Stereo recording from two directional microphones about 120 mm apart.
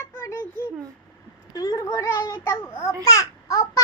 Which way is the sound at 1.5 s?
30° left (ahead or behind).